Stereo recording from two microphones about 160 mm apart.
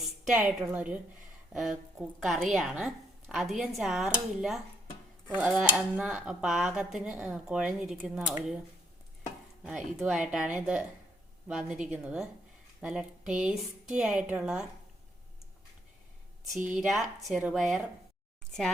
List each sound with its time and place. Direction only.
0.3 s a woman's voice: 5° right (ahead or behind)
1.5 s dishes: 5° right (ahead or behind)
9.6 s dishes: 5° right (ahead or behind)
16.5 s a woman's voice: 15° right (ahead or behind)
16.7 s dishes: centre (ahead or behind)